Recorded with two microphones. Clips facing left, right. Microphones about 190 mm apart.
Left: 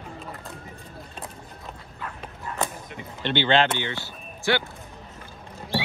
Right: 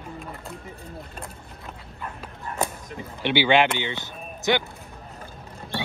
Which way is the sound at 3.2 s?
10° right (ahead or behind).